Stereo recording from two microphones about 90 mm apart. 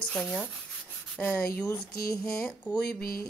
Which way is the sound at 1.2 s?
15° left (ahead or behind).